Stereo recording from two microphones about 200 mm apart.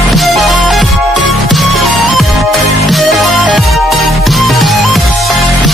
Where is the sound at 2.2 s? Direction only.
Centre (ahead or behind).